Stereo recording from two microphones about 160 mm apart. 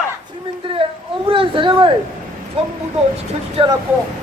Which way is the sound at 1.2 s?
35° right (ahead or behind).